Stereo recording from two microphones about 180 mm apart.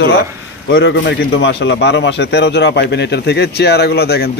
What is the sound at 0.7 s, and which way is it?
A man's voice, 80° left.